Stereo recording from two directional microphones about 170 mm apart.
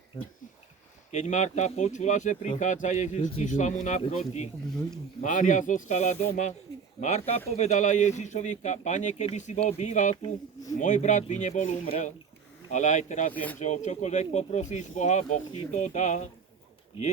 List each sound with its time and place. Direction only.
1.1 s speech: 45° left (ahead or behind)
13.3 s speech: 10° left (ahead or behind)
13.6 s speech: 45° left (ahead or behind)